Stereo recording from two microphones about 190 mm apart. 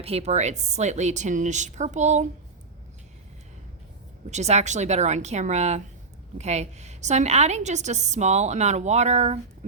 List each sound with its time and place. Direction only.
0.0 s a woman's voice: 35° right (ahead or behind)
4.3 s a woman's voice: 35° right (ahead or behind)